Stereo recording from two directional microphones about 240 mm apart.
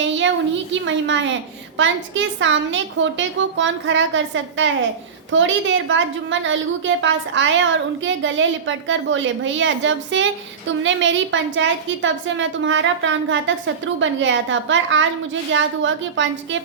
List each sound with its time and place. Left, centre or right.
0.0 s a woman's voice: right